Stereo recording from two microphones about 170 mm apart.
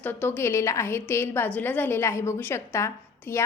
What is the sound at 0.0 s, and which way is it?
A woman's voice, 10° left (ahead or behind).